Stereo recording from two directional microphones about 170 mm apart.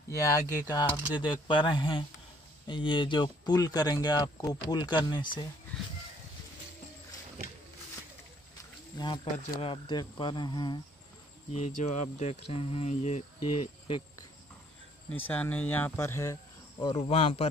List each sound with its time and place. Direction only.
0.6 s speech: 20° left (ahead or behind)
8.9 s speech: 25° left (ahead or behind)
11.5 s speech: 45° left (ahead or behind)
15.0 s speech: 10° left (ahead or behind)
16.8 s speech: 30° left (ahead or behind)